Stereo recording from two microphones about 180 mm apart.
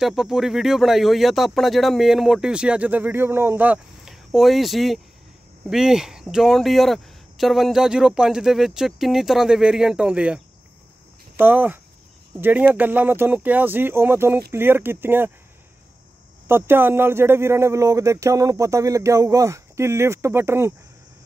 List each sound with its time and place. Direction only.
0.0 s speech: centre (ahead or behind)
16.4 s speech: 10° right (ahead or behind)